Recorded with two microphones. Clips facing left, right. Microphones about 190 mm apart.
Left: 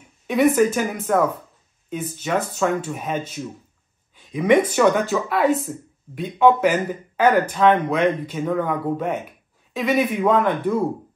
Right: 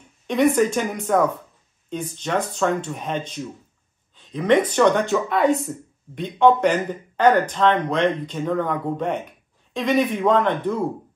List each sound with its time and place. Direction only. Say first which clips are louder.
0.3 s speech: left 1 dB; 5° left (ahead or behind)